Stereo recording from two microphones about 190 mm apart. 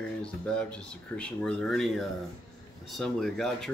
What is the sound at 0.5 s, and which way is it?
Speech, 5° left (ahead or behind).